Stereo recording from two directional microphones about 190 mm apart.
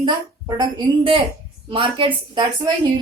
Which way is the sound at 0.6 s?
25° right (ahead or behind).